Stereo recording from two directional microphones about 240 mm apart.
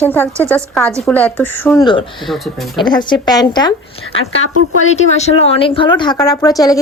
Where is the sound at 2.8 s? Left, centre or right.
Centre.